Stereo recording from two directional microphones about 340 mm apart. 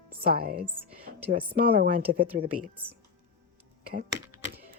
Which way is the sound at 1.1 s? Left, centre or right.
Right.